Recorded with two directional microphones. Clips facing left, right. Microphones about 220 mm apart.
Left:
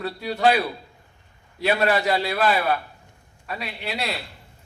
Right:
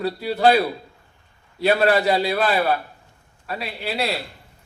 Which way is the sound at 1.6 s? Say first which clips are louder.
Right 3 dB; 35° right (ahead or behind).